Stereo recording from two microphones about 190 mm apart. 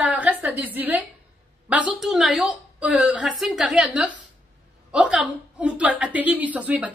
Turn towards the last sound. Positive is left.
turn(degrees=-5)  # may be behind; listen again after turning